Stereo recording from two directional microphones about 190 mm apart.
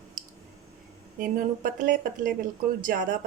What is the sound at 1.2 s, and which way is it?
Speech, 45° right (ahead or behind).